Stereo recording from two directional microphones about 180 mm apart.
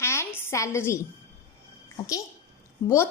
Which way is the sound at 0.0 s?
15° left (ahead or behind).